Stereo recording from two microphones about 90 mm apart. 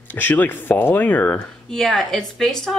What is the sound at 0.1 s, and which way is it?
Speech, 20° left (ahead or behind).